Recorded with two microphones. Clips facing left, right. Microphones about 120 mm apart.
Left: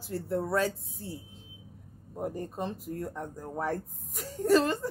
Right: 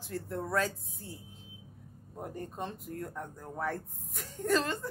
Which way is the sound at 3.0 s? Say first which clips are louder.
Left 1 dB; 10° left (ahead or behind).